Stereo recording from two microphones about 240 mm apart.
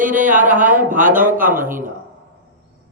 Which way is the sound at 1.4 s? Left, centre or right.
Right.